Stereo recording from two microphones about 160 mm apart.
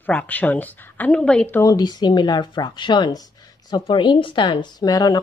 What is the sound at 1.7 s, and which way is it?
Speech, 25° left (ahead or behind).